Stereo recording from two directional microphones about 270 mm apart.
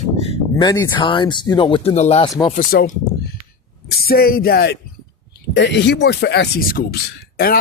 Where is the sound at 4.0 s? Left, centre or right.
Left.